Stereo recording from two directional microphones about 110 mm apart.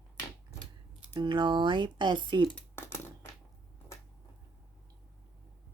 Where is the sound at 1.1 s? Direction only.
45° right (ahead or behind).